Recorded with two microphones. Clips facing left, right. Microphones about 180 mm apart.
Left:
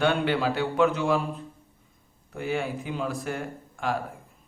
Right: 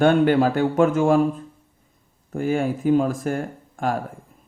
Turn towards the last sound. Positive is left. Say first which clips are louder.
# right 5 dB
turn(degrees=-45)  # may be behind; listen again after turning